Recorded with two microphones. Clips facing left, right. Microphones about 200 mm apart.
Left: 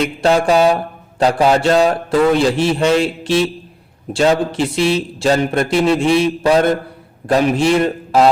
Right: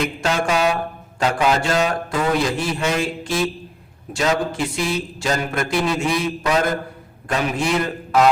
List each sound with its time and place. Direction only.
0.0 s mantra: 35° left (ahead or behind)
1.2 s speech: 35° left (ahead or behind)